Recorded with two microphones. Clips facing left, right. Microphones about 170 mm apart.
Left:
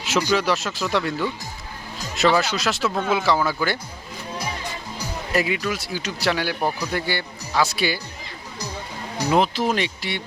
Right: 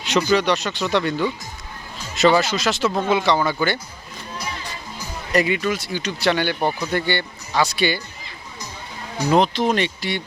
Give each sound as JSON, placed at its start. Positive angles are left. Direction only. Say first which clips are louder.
{"t": 0.0, "sound": "speech", "louder": "right 3 dB", "side_deg": 0}
{"t": 5.3, "sound": "speech", "louder": "right 4 dB", "side_deg": 0}
{"t": 9.3, "sound": "speech", "louder": "right 2 dB", "side_deg": 5}